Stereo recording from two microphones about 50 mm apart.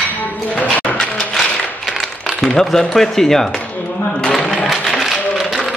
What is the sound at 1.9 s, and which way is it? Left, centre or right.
Coin, centre.